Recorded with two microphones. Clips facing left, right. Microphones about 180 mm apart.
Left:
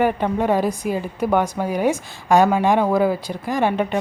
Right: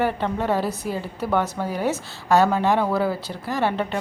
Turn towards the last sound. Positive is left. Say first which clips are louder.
# left 4 dB
turn(degrees=15)  # may be behind; listen again after turning